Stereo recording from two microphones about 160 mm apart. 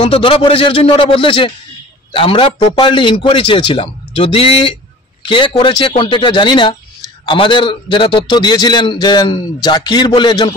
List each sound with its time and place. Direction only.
0.0 s a man's voice: 35° left (ahead or behind)